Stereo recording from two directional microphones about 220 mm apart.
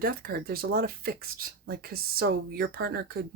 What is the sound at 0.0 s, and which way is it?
Speech, 40° right (ahead or behind).